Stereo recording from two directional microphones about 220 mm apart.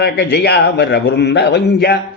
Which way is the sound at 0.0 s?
50° left (ahead or behind).